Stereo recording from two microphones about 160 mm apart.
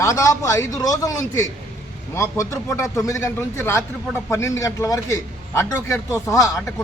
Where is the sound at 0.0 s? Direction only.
20° left (ahead or behind).